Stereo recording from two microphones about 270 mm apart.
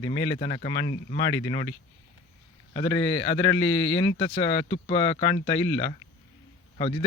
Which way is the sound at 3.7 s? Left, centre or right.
Left.